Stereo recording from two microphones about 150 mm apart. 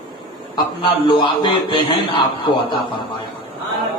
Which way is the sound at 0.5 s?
30° left (ahead or behind).